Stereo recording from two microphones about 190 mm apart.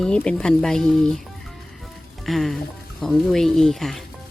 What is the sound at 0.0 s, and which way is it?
Speech, 5° left (ahead or behind).